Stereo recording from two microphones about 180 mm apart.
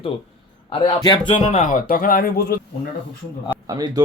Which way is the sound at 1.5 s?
45° left (ahead or behind).